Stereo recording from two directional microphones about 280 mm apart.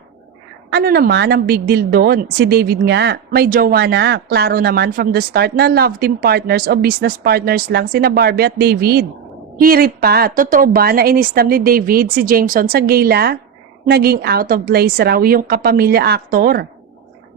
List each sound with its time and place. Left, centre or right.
0.7 s speech: right